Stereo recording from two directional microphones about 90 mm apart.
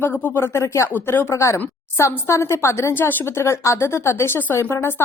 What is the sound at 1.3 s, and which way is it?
Speech, 35° left (ahead or behind).